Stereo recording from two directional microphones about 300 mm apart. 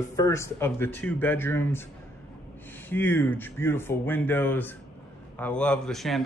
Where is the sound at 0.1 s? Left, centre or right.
Centre.